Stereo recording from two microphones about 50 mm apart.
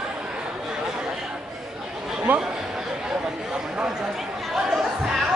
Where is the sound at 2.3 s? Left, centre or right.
Right.